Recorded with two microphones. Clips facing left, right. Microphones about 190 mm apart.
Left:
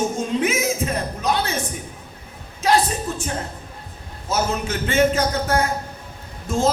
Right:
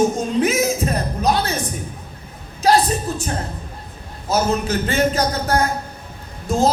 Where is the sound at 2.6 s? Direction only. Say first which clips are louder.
Right 3 dB; 35° right (ahead or behind).